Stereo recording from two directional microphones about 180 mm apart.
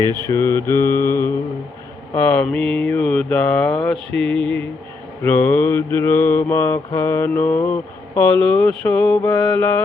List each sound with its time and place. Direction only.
0.0 s mantra: 15° left (ahead or behind)
2.3 s mantra: 5° left (ahead or behind)